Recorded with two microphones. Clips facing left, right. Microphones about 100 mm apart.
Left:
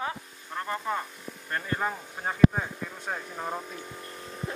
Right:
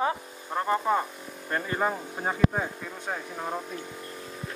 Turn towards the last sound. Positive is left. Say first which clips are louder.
# right 1 dB
turn(degrees=0)  # may be behind; listen again after turning